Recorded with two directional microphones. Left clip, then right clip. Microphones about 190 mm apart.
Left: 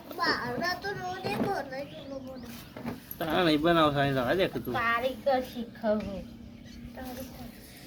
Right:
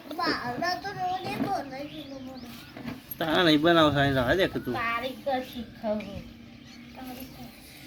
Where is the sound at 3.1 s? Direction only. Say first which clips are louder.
Right 4 dB; 25° right (ahead or behind).